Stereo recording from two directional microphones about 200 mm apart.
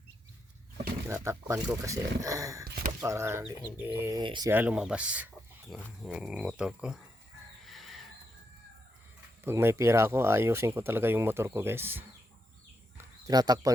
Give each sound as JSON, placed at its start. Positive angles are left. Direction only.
{"t": 1.0, "sound": "speech", "side_deg": -15}
{"t": 4.2, "sound": "speech", "side_deg": -20}
{"t": 4.5, "sound": "speech", "side_deg": -5}
{"t": 7.6, "sound": "crow", "side_deg": 0}
{"t": 9.4, "sound": "speech", "side_deg": -10}
{"t": 13.0, "sound": "a sound", "side_deg": -20}